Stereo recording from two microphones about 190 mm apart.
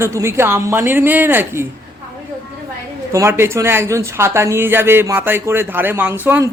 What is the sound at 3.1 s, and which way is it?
Speech, 15° right (ahead or behind).